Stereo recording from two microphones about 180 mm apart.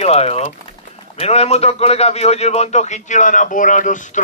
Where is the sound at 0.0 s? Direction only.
35° left (ahead or behind).